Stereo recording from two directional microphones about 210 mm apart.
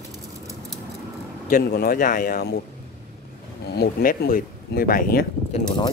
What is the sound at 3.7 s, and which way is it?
Speech, 45° left (ahead or behind).